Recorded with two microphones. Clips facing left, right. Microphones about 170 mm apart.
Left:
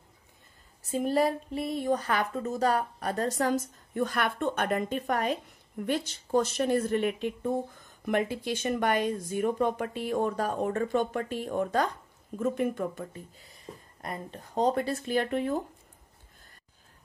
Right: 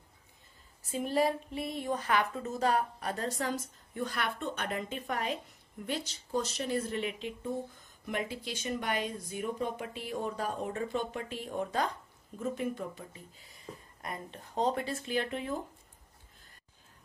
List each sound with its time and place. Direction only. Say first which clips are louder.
0.9 s speech: left 3 dB; 45° left (ahead or behind)
14.0 s speech: left 4 dB; 40° left (ahead or behind)